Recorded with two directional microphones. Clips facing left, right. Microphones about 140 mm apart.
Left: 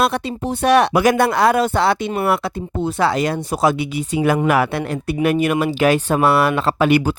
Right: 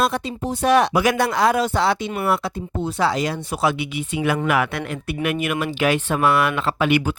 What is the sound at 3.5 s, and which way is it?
Speech, 40° left (ahead or behind).